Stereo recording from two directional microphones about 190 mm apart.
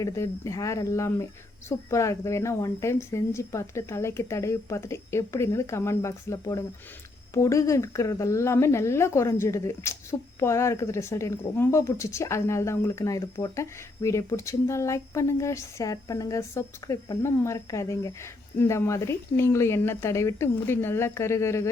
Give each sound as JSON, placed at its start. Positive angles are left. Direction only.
{"t": 0.0, "sound": "speech", "side_deg": 15}